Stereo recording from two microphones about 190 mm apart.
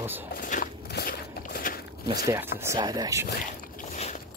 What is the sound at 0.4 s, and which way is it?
Walk, 45° left (ahead or behind).